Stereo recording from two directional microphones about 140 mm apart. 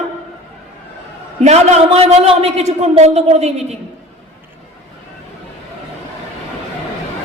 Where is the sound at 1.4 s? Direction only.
50° right (ahead or behind).